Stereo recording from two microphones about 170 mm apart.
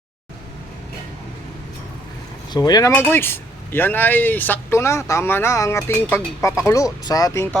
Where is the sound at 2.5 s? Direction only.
25° left (ahead or behind).